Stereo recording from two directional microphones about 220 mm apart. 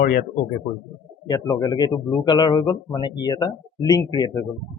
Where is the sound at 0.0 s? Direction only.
50° left (ahead or behind).